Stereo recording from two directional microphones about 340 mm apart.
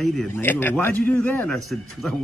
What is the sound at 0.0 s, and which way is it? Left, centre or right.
A man's voice, centre.